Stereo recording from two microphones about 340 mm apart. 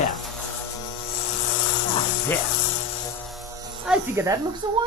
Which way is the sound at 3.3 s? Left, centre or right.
Centre.